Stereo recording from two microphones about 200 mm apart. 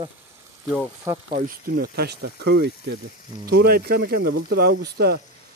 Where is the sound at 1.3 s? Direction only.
50° right (ahead or behind).